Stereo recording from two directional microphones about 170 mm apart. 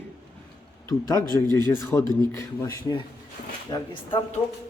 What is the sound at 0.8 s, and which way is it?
A man's voice, 20° left (ahead or behind).